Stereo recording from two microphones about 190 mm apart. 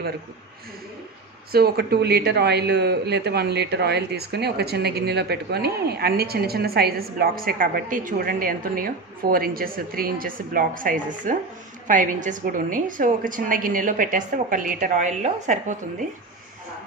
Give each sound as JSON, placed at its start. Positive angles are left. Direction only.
{"t": 1.5, "sound": "a man's voice", "side_deg": -55}